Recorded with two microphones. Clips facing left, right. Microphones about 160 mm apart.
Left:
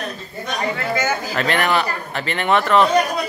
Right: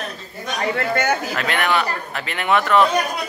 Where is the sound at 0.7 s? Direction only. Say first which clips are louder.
Right 3 dB; 65° right (ahead or behind).